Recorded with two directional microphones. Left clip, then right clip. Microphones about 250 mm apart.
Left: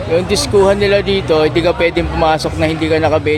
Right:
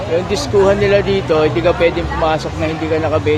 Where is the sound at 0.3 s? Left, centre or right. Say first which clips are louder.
Left 1 dB; centre.